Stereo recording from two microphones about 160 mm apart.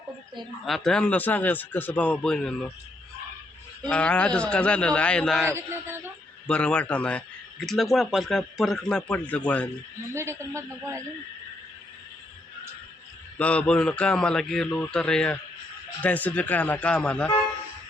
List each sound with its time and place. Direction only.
0.6 s a man's voice: centre (ahead or behind)
3.8 s a man's voice: 5° left (ahead or behind)
5.5 s a man's voice: 15° right (ahead or behind)
6.5 s speech: 5° left (ahead or behind)
10.2 s a man's voice: 15° right (ahead or behind)
13.4 s a man's voice: 10° left (ahead or behind)